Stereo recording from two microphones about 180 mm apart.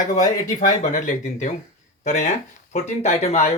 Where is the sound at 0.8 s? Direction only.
45° left (ahead or behind).